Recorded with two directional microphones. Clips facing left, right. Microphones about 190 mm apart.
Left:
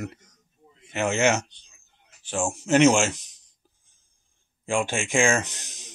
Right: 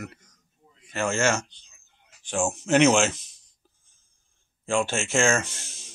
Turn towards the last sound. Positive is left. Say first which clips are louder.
# even
turn(degrees=15)  # may be behind; listen again after turning